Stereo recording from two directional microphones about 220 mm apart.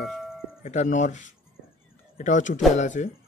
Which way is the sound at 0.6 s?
35° left (ahead or behind).